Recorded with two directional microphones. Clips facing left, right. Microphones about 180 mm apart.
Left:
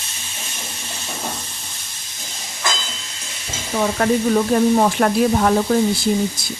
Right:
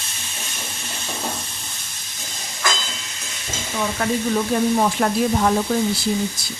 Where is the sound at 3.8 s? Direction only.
50° left (ahead or behind).